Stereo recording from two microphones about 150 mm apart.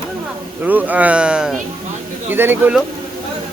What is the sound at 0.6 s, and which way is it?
Speech, 10° right (ahead or behind).